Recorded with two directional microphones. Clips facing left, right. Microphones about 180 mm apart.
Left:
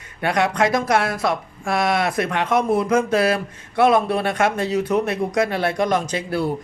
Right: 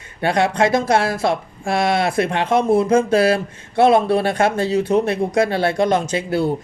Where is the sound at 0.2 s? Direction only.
30° right (ahead or behind).